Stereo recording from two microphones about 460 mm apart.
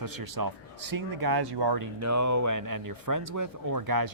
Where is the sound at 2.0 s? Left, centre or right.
Right.